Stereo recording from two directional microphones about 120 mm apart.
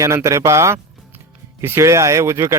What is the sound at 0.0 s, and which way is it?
Speech, 25° right (ahead or behind).